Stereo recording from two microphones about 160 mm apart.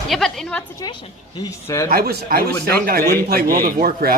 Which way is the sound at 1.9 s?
65° right (ahead or behind).